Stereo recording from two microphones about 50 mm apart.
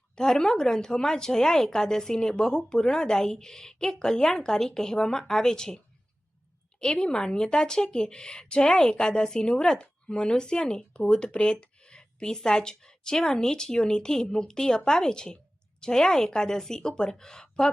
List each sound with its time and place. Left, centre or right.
0.2 s speech: centre